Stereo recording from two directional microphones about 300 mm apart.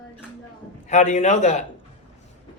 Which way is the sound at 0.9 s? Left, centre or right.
Left.